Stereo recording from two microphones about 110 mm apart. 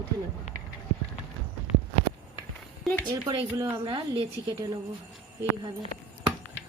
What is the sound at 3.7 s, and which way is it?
Speech, 45° right (ahead or behind).